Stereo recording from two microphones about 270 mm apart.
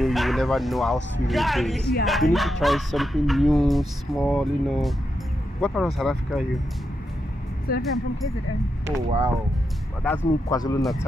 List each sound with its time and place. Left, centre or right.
0.0 s speech: centre
5.9 s speech: centre
7.7 s speech: left
8.8 s speech: centre
10.0 s speech: centre
10.8 s speech: centre